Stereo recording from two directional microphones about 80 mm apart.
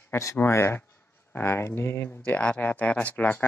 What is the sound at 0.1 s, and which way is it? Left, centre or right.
Speech, left.